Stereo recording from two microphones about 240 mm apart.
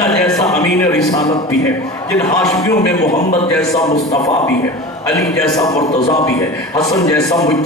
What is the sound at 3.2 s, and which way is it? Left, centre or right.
Speech, left.